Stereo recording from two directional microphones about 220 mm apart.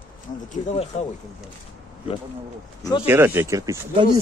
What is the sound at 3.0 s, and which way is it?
Speech, 10° right (ahead or behind).